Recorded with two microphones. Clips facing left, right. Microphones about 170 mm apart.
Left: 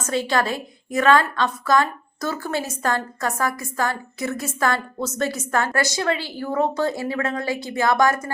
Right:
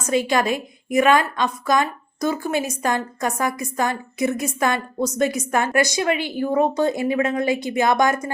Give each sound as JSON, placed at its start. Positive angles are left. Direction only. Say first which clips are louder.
{"t": 0.0, "sound": "a woman's voice", "louder": "right 2 dB", "side_deg": -15}